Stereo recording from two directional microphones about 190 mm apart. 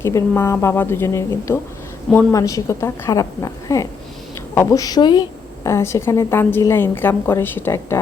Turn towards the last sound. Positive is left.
turn(degrees=10)  # may be behind; listen again after turning